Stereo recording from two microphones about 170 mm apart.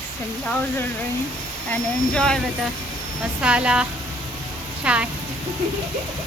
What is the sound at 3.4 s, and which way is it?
A woman's voice, 5° right (ahead or behind).